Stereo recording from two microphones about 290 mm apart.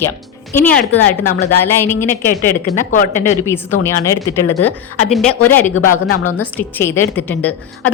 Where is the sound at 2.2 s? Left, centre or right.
Left.